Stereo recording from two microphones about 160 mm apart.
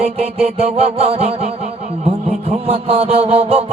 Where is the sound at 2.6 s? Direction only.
40° right (ahead or behind).